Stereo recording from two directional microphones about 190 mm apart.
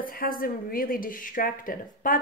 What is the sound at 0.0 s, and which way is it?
Speech, 50° left (ahead or behind).